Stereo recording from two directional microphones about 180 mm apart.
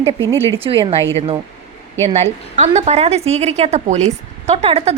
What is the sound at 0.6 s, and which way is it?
Speech, 30° right (ahead or behind).